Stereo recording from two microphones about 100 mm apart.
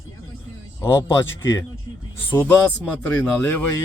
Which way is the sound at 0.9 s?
25° left (ahead or behind).